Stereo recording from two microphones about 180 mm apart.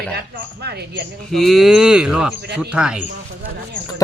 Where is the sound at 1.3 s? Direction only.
Centre (ahead or behind).